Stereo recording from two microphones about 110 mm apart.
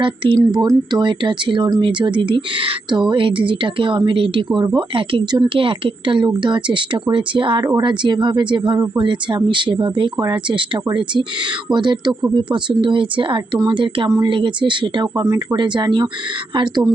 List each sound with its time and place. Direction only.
0.0 s speech: 45° right (ahead or behind)
0.3 s speech: 35° right (ahead or behind)